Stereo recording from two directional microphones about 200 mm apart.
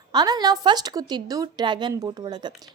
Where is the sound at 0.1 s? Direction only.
20° right (ahead or behind).